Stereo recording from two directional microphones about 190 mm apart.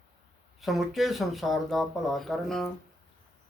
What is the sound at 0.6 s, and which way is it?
Speech, centre (ahead or behind).